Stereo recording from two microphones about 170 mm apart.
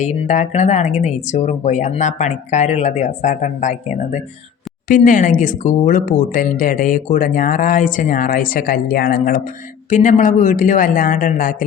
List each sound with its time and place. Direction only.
0.0 s speech: 45° left (ahead or behind)